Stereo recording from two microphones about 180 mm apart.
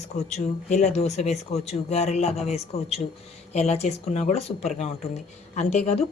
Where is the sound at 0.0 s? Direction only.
40° left (ahead or behind).